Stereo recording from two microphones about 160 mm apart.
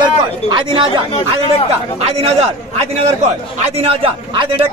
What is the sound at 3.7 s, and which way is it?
Speech, 35° right (ahead or behind).